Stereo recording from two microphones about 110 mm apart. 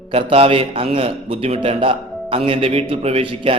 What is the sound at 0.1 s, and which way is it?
A man's voice, 60° right (ahead or behind).